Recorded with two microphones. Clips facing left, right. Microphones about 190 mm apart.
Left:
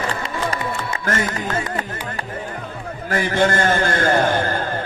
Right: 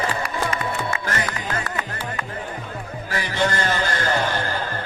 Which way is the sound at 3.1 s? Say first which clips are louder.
Left 5 dB; 50° left (ahead or behind).